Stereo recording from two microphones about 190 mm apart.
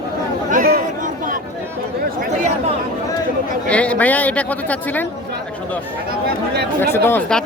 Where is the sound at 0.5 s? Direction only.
45° right (ahead or behind).